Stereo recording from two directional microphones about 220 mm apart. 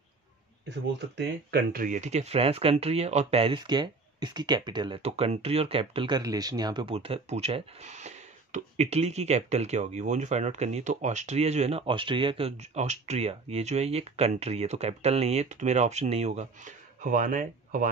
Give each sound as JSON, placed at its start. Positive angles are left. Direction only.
{"t": 1.1, "sound": "speech", "side_deg": -45}